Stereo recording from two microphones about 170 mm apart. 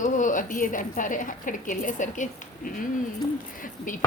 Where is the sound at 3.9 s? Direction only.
50° left (ahead or behind).